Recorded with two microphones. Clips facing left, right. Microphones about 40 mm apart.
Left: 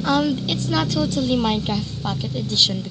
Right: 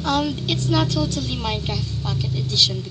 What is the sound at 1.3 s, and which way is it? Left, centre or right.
Speech, centre.